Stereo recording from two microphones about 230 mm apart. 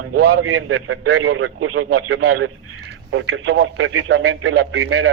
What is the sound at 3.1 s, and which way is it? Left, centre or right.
A man's voice, right.